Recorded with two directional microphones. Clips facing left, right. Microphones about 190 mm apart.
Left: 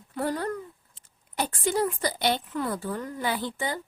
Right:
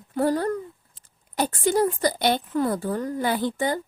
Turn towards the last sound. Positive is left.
turn(degrees=-45)  # may be behind; listen again after turning